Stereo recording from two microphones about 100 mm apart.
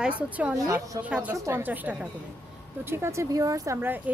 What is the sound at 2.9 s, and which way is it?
Speech, 25° right (ahead or behind).